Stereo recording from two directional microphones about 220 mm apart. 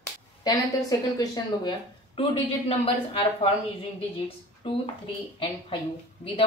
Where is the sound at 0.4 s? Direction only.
15° left (ahead or behind).